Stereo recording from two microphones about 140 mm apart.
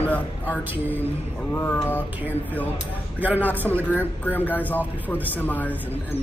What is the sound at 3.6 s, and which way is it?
Speech, 10° left (ahead or behind).